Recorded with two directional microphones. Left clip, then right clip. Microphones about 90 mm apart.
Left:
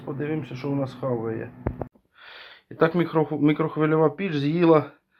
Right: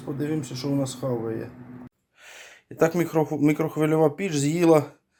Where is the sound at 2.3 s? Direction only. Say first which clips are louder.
Left 1 dB; 10° right (ahead or behind).